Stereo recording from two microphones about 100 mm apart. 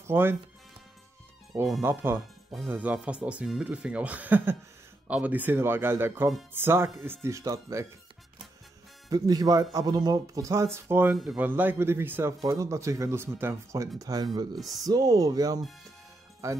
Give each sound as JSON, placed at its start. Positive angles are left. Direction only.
{"t": 0.0, "sound": "speech", "side_deg": -20}
{"t": 1.8, "sound": "speech", "side_deg": -20}
{"t": 9.1, "sound": "speech", "side_deg": -40}